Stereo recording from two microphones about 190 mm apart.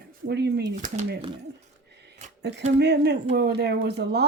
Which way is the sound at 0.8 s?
40° right (ahead or behind).